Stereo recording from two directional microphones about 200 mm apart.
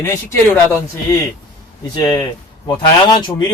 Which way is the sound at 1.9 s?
20° left (ahead or behind).